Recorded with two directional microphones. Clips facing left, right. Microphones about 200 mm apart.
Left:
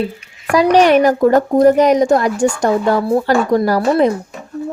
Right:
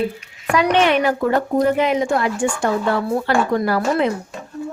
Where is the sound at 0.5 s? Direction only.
35° left (ahead or behind).